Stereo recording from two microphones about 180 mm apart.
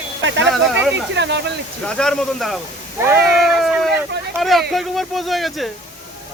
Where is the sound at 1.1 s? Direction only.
80° right.